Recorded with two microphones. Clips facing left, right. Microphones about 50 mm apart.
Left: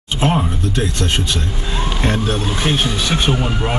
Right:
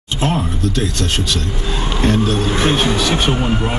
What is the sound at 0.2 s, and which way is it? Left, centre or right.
Speech, centre.